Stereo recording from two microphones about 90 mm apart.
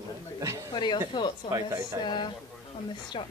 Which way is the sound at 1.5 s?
40° right (ahead or behind).